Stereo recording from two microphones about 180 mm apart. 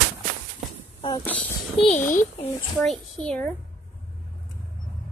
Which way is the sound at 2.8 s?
Centre (ahead or behind).